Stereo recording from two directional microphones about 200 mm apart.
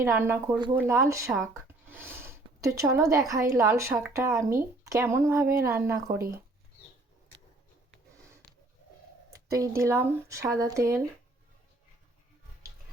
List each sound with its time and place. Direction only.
0.0 s speech: 10° right (ahead or behind)
9.5 s speech: 15° right (ahead or behind)